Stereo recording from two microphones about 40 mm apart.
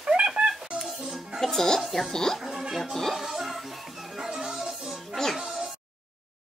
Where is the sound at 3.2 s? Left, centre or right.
Centre.